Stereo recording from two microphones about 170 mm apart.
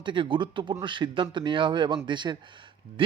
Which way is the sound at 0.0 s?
30° right (ahead or behind).